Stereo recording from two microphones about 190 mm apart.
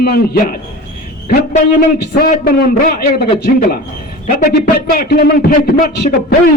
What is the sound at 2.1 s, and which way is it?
A man's voice, 50° left (ahead or behind).